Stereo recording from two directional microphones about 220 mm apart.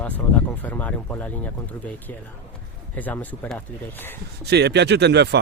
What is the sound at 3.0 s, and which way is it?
Speech, 5° left (ahead or behind).